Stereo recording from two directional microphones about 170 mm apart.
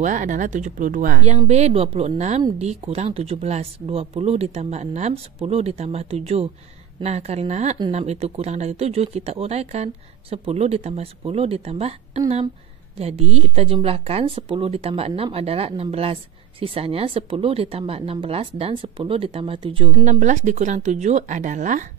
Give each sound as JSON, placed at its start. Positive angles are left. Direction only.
{"t": 0.0, "sound": "speech", "side_deg": -50}
{"t": 1.5, "sound": "speech", "side_deg": -40}
{"t": 19.9, "sound": "speech", "side_deg": -45}